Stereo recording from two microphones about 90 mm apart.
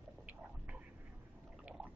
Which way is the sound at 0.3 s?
15° right (ahead or behind).